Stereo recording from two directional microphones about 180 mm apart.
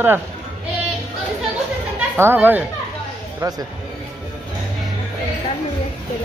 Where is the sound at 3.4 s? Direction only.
20° right (ahead or behind).